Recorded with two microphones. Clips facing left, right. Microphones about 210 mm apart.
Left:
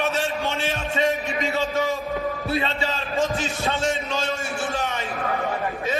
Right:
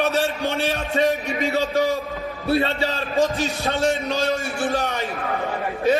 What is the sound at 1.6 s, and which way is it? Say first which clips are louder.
Speech: right 4 dB; 35° right (ahead or behind).